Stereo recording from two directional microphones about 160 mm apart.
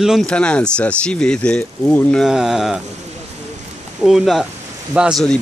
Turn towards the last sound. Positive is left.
turn(degrees=-5)  # may be behind; listen again after turning